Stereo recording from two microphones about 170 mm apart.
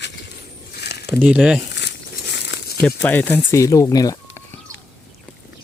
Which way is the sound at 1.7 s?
85° left.